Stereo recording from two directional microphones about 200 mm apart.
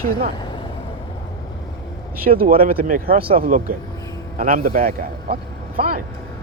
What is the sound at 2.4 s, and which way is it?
Speech, 45° right (ahead or behind).